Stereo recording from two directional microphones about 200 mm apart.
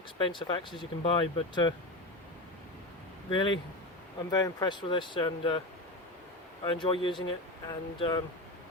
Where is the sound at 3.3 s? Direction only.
25° left (ahead or behind).